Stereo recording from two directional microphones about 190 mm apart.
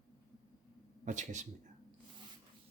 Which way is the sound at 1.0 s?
40° right (ahead or behind).